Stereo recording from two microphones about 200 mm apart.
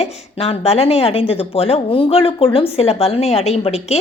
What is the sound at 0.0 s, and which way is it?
Speech, 30° left (ahead or behind).